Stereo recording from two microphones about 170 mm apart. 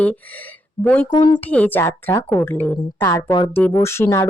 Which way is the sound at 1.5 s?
10° left (ahead or behind).